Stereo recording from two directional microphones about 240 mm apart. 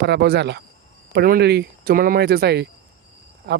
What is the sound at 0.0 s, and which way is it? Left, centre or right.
Speech, right.